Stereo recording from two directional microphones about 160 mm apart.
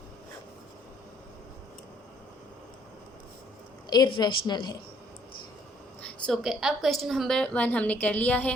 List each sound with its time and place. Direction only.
3.8 s speech: 25° left (ahead or behind)
6.0 s a woman's voice: 5° left (ahead or behind)